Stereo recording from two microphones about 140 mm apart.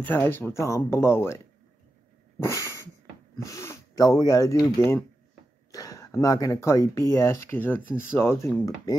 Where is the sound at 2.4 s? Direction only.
20° left (ahead or behind).